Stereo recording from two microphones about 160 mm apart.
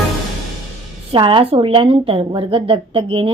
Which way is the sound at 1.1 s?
30° right (ahead or behind).